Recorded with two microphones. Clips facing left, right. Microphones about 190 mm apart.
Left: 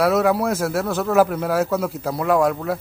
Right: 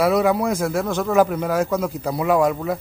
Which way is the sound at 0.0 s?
Centre (ahead or behind).